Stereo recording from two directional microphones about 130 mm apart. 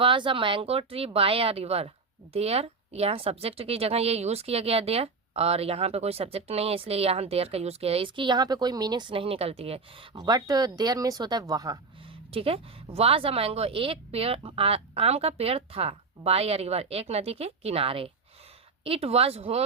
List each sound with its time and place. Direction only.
0.0 s speech: 40° right (ahead or behind)
10.2 s speech: 30° right (ahead or behind)
12.3 s speech: 45° right (ahead or behind)